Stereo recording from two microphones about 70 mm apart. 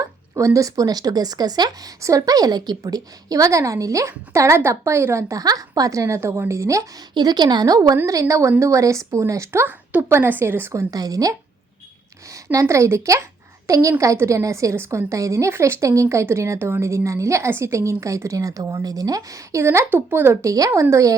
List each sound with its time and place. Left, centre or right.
0.0 s speech: right
2.0 s a woman's voice: right
5.4 s a woman's voice: right
7.1 s speech: right
8.0 s a woman's voice: right
10.0 s speech: right
10.8 s a woman's voice: right
12.3 s a woman's voice: right
19.6 s speech: right
20.4 s a woman's voice: right